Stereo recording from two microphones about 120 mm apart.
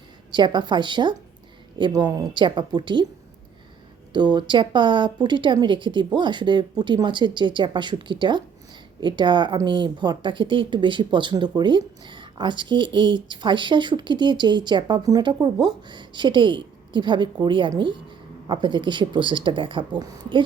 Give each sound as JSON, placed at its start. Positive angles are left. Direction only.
{"t": 0.3, "sound": "speech", "side_deg": -40}
{"t": 4.1, "sound": "speech", "side_deg": -40}